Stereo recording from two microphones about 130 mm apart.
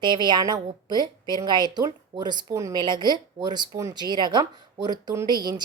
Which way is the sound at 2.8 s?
35° right (ahead or behind).